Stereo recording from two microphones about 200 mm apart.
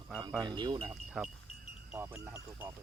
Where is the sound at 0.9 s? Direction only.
5° right (ahead or behind).